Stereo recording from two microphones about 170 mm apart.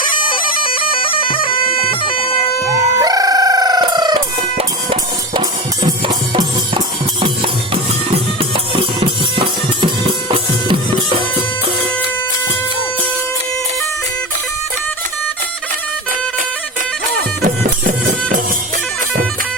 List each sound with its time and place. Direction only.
0.6 s bagpipes: 30° left (ahead or behind)
3.0 s music: 20° right (ahead or behind)
17.2 s music: 55° right (ahead or behind)